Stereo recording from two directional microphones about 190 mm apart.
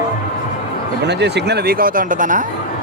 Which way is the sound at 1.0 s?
60° right (ahead or behind).